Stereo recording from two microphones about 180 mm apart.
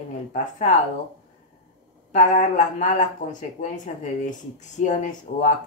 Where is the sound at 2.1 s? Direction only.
45° left (ahead or behind).